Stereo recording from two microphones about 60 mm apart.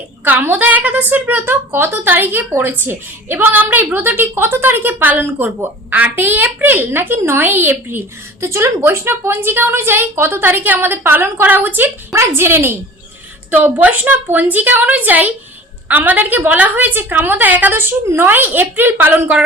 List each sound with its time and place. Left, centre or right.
0.3 s a woman's voice: right
12.1 s a woman's voice: right
13.8 s a woman's voice: right